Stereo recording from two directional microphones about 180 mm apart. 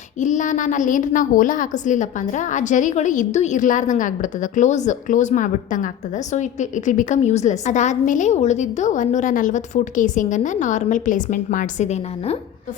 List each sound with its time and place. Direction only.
0.2 s a woman's voice: 45° left (ahead or behind)